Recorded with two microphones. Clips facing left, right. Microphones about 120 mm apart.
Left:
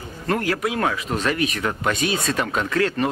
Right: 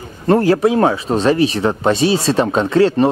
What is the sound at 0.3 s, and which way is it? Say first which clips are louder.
Speech: right 10 dB; 30° right (ahead or behind).